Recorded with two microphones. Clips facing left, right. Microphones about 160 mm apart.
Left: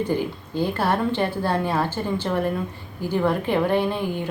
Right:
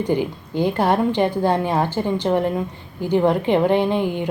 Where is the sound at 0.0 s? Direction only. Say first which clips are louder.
Right 3 dB; 15° right (ahead or behind).